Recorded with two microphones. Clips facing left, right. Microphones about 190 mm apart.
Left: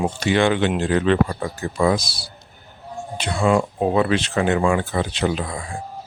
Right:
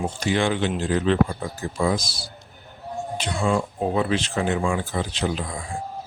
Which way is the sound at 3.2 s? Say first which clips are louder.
Left 5 dB; 70° left (ahead or behind).